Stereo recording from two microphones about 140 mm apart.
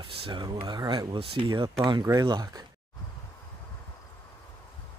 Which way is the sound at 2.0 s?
25° right (ahead or behind).